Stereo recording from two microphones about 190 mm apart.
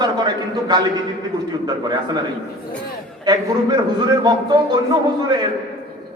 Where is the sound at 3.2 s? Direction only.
20° right (ahead or behind).